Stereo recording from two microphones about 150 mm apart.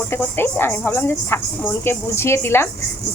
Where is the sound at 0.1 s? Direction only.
15° left (ahead or behind).